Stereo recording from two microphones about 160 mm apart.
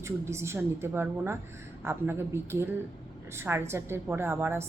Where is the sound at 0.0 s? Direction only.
15° right (ahead or behind).